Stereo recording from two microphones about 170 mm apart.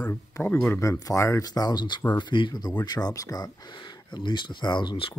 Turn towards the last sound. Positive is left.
turn(degrees=30)  # may be behind; listen again after turning